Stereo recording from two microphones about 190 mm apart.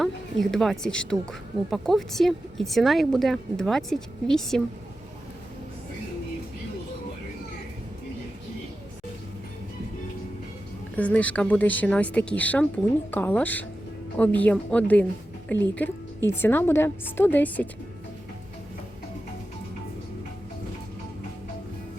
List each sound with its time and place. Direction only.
0.0 s a woman's voice: centre (ahead or behind)
10.9 s a woman's voice: 5° left (ahead or behind)